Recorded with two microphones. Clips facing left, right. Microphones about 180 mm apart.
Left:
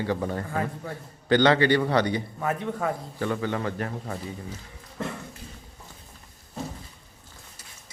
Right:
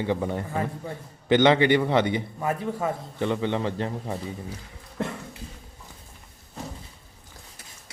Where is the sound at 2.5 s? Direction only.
5° right (ahead or behind).